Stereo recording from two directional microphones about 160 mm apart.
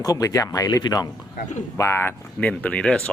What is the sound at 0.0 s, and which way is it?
A man's voice, 20° left (ahead or behind).